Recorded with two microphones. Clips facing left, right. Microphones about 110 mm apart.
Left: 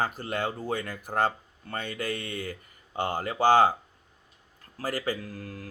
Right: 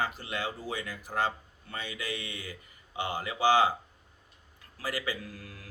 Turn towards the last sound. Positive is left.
turn(degrees=45)  # may be behind; listen again after turning